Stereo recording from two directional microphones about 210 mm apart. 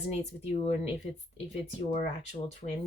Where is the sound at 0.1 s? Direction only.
30° left (ahead or behind).